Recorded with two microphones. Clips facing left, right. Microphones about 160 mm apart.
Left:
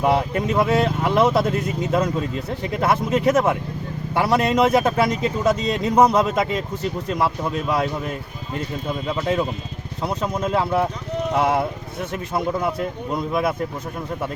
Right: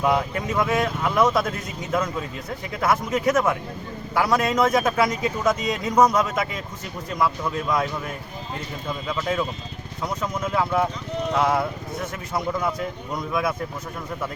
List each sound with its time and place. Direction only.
0.0 s a man's voice: 30° left (ahead or behind)
9.0 s a man's voice: 30° left (ahead or behind)